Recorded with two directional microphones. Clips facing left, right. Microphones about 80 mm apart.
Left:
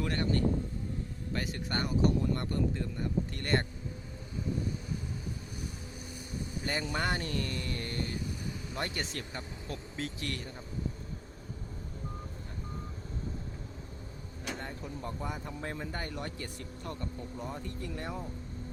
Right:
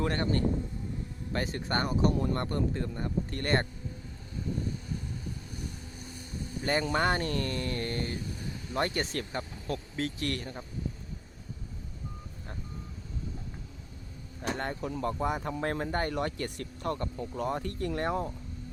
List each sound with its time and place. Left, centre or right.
0.0 s speech: right
1.5 s speech: right
6.7 s speech: right
14.5 s speech: right
16.1 s speech: right